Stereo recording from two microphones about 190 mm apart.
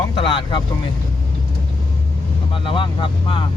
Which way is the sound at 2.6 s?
25° left (ahead or behind).